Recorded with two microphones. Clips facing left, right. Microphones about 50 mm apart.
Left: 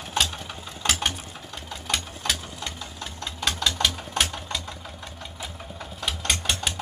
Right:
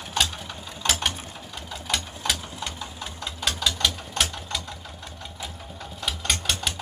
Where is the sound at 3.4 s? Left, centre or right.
Centre.